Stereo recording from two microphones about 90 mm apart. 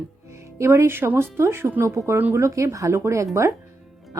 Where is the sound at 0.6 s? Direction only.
30° right (ahead or behind).